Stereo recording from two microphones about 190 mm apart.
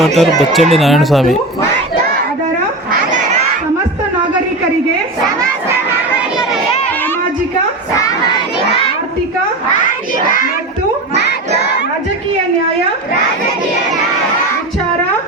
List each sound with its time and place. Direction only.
0.0 s speech: centre (ahead or behind)
3.1 s a sound: 40° right (ahead or behind)
10.2 s child singing: 45° left (ahead or behind)